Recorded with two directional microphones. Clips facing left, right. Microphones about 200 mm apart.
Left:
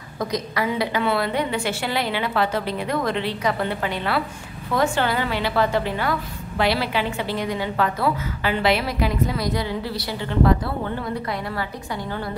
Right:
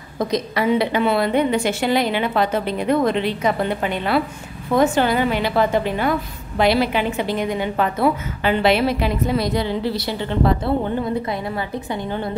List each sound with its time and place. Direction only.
0.2 s a woman's voice: 25° right (ahead or behind)